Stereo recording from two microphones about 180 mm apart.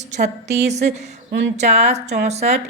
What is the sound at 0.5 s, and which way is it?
A woman's voice, 40° right (ahead or behind).